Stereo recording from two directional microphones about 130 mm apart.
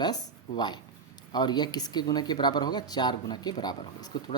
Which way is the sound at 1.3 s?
35° left (ahead or behind).